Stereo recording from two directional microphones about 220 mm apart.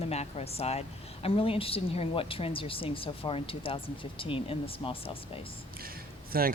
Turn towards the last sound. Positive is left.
turn(degrees=-40)  # may be behind; listen again after turning